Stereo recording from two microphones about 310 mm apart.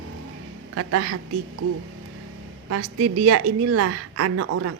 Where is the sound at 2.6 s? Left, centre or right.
Right.